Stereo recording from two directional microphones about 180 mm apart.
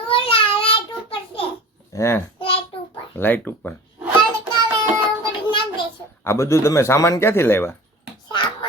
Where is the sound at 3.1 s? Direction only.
10° left (ahead or behind).